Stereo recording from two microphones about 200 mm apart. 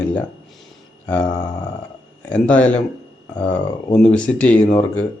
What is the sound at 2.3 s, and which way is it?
Speech, 5° left (ahead or behind).